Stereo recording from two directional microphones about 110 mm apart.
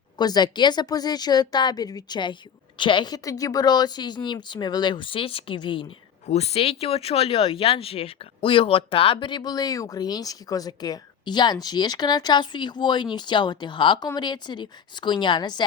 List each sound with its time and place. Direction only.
0.2 s speech: 40° left (ahead or behind)
6.2 s speech: 75° left (ahead or behind); by 15.6 s 40° left (ahead or behind)